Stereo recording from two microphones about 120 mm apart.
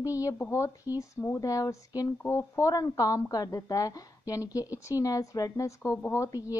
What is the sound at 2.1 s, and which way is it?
Speech, 15° left (ahead or behind).